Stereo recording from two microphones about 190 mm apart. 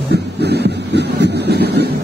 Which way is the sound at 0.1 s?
60° right (ahead or behind).